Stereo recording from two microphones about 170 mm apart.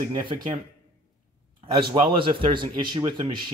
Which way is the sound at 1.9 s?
30° right (ahead or behind).